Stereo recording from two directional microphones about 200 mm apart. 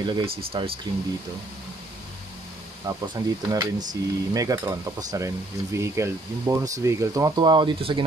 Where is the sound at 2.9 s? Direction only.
20° right (ahead or behind).